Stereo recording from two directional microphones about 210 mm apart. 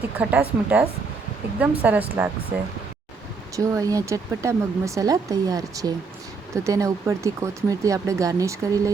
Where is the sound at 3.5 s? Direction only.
15° right (ahead or behind).